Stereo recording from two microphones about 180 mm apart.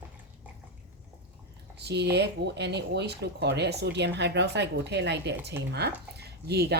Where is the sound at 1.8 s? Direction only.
65° right (ahead or behind).